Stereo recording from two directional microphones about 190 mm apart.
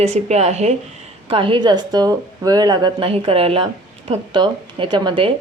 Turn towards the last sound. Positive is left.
turn(degrees=-25)  # may be behind; listen again after turning